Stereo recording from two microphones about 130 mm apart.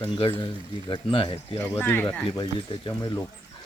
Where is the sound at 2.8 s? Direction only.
25° left (ahead or behind).